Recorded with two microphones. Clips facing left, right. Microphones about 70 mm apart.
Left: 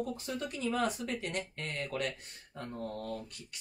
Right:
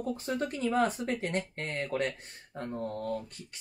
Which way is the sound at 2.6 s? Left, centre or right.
Right.